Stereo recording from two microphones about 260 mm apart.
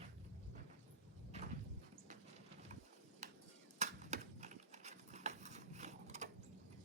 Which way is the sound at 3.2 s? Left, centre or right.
Right.